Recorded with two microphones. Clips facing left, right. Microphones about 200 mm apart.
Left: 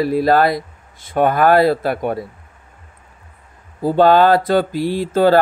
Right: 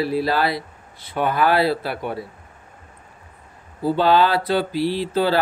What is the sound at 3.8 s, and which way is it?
A man's voice, 45° left (ahead or behind).